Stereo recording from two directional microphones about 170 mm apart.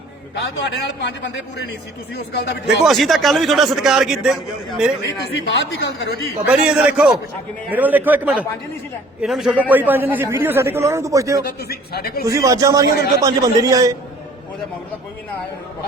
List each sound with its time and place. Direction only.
0.3 s a man's voice: 80° left
2.1 s speech: 70° left (ahead or behind)
2.8 s a man's voice: centre (ahead or behind)
5.0 s a man's voice: 90° left
6.4 s a man's voice: 5° right (ahead or behind)
11.7 s a man's voice: 65° left (ahead or behind)
12.2 s a man's voice: 20° right (ahead or behind)